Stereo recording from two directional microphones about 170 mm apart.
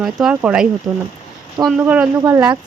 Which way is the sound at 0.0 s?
5° right (ahead or behind).